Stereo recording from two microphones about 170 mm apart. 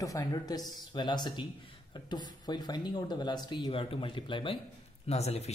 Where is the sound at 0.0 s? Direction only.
20° left (ahead or behind).